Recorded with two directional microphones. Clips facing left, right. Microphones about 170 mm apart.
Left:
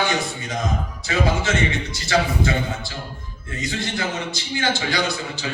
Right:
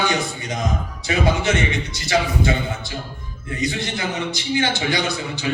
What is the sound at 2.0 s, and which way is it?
A man's voice, 20° right (ahead or behind).